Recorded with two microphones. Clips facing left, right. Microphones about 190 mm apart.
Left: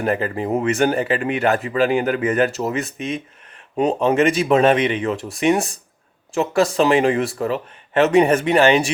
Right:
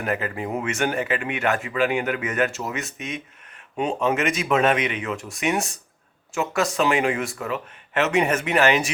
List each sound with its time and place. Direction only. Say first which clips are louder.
0.0 s speech: left 5 dB; 35° left (ahead or behind)